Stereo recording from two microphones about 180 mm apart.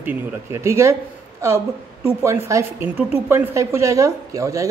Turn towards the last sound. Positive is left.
turn(degrees=-15)  # may be behind; listen again after turning